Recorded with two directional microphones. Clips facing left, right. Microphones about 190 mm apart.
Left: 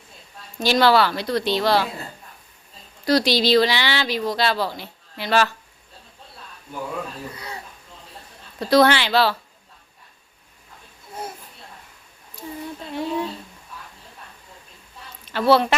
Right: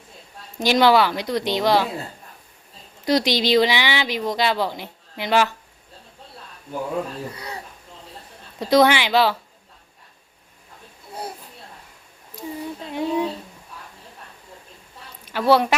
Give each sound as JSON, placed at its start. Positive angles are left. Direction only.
{"t": 0.6, "sound": "a woman's voice", "side_deg": -15}
{"t": 3.0, "sound": "speech", "side_deg": -20}
{"t": 8.5, "sound": "a woman's voice", "side_deg": -15}
{"t": 12.9, "sound": "a woman's voice", "side_deg": -15}
{"t": 15.2, "sound": "a woman's voice", "side_deg": -10}